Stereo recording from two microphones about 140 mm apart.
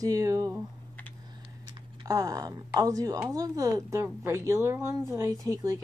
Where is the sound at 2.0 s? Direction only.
25° right (ahead or behind).